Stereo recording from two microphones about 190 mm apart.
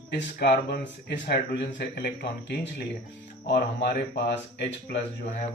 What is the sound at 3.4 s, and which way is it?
Speech, 60° left (ahead or behind).